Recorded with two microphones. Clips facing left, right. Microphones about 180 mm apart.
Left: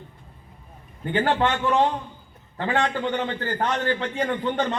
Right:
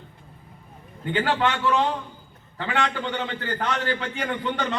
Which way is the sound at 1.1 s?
30° left (ahead or behind).